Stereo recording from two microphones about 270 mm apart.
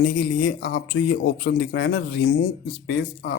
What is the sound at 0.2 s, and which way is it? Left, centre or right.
Speech, left.